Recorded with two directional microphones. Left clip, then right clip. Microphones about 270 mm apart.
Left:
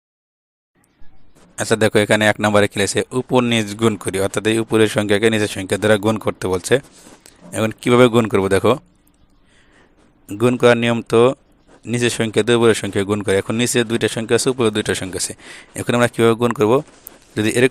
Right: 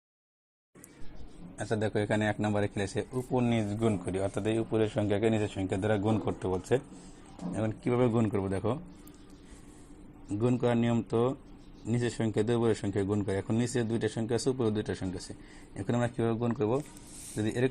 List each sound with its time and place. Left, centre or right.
1.5 s speech: left
10.2 s speech: left